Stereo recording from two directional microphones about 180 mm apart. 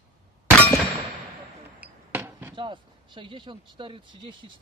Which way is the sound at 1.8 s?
10° right (ahead or behind).